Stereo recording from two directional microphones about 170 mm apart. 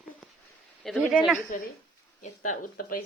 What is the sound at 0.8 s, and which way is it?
Speech, centre (ahead or behind).